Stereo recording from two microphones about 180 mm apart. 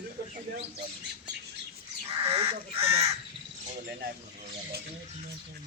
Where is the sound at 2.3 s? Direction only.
35° right (ahead or behind).